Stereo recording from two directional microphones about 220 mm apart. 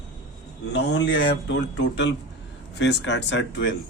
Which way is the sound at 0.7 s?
50° left (ahead or behind).